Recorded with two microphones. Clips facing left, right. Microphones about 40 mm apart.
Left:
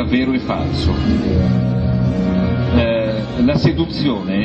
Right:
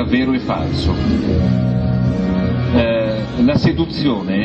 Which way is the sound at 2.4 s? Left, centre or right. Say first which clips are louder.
Right 2 dB; right.